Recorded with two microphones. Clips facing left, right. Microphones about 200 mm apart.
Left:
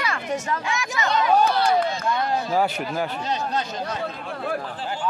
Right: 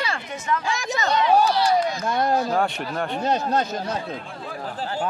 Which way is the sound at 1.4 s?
55° left (ahead or behind).